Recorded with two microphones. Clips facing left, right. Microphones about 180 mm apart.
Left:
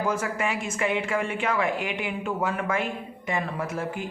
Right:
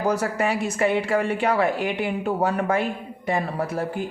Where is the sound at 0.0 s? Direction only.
35° right (ahead or behind).